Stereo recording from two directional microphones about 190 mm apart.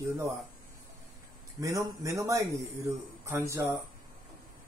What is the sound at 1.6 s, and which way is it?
Speech, 15° right (ahead or behind).